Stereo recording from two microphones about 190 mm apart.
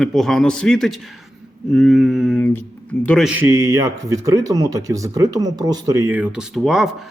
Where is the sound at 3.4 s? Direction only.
15° right (ahead or behind).